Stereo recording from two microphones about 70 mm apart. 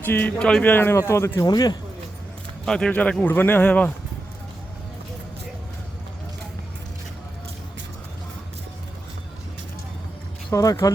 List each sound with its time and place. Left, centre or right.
0.0 s speech: left
0.9 s speech: left
1.5 s speech: left
2.6 s speech: centre
10.5 s speech: left